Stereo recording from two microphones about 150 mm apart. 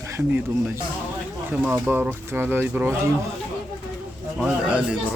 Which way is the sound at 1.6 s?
10° right (ahead or behind).